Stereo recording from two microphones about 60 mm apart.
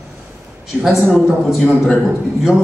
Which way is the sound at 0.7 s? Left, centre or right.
Right.